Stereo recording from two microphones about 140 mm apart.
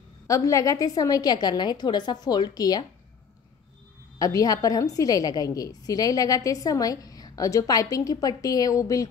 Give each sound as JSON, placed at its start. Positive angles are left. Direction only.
{"t": 0.3, "sound": "a woman's voice", "side_deg": 25}
{"t": 4.2, "sound": "a woman's voice", "side_deg": 25}